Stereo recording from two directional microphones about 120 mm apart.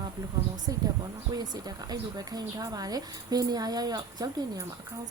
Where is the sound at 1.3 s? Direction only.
35° right (ahead or behind).